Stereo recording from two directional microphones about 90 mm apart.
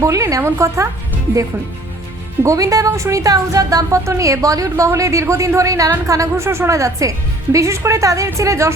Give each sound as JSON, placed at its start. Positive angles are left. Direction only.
{"t": 0.0, "sound": "a woman's voice", "side_deg": -35}
{"t": 2.4, "sound": "speech", "side_deg": -35}